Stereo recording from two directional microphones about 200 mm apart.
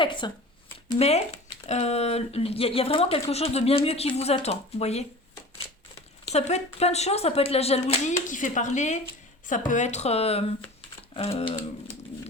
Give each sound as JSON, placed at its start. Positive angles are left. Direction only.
{"t": 0.0, "sound": "speech", "side_deg": 25}
{"t": 6.3, "sound": "speech", "side_deg": 30}